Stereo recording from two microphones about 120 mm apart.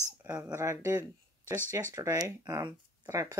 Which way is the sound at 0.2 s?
15° right (ahead or behind).